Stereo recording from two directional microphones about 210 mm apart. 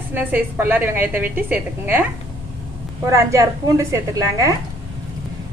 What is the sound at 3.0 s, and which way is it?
A woman's voice, 15° right (ahead or behind).